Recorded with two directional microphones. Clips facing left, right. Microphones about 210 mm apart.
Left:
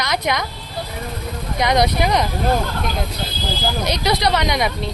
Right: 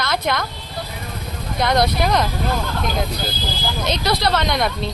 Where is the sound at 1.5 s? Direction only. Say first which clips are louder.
Left 1 dB; 15° left (ahead or behind).